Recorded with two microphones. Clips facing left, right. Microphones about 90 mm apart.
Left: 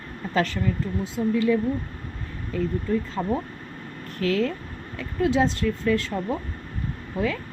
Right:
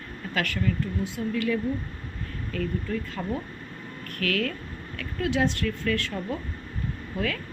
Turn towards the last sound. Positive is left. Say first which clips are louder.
# left 3 dB
turn(degrees=20)  # may be behind; listen again after turning